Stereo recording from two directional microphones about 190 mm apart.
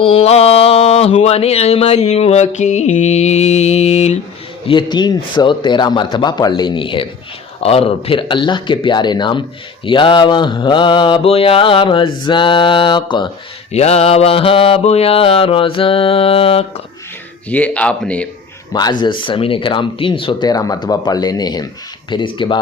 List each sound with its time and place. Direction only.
0.0 s a sound: 30° left (ahead or behind)
4.6 s mantra: 25° left (ahead or behind)
17.5 s speech: 10° left (ahead or behind)
18.7 s mantra: 20° left (ahead or behind)